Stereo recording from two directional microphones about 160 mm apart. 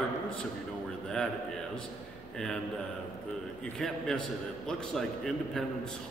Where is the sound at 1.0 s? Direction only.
5° left (ahead or behind).